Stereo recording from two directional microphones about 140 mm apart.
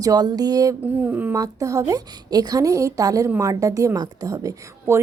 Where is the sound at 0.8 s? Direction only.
15° right (ahead or behind).